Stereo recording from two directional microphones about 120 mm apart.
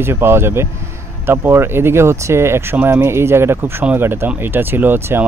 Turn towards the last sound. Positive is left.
turn(degrees=-15)  # may be behind; listen again after turning